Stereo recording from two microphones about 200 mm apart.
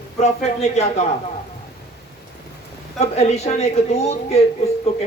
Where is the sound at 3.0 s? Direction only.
35° left (ahead or behind).